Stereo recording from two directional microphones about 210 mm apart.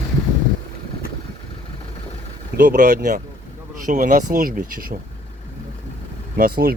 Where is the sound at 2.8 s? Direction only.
50° right (ahead or behind).